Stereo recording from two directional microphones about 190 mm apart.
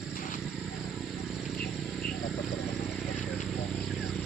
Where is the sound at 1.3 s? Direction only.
Centre (ahead or behind).